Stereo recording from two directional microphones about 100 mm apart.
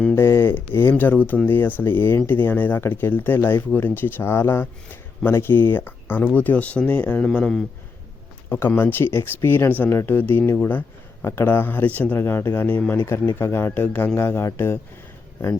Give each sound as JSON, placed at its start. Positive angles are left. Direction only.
{"t": 0.2, "sound": "speech", "side_deg": 25}
{"t": 8.4, "sound": "speech", "side_deg": 20}